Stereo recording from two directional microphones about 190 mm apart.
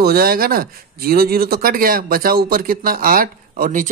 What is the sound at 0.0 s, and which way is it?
Speech, 55° right (ahead or behind).